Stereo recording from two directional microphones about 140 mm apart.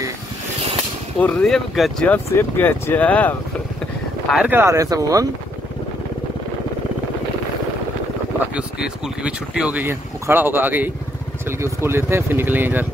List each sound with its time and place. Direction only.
1.2 s speech: 5° left (ahead or behind)
2.1 s speech: 15° left (ahead or behind)
4.3 s speech: 10° right (ahead or behind)
8.5 s speech: 5° right (ahead or behind)